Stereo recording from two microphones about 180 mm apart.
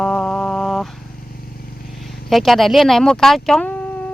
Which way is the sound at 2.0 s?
Centre (ahead or behind).